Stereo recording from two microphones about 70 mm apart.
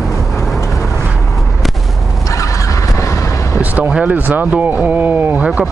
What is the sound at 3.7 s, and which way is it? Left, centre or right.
Vehicle, centre.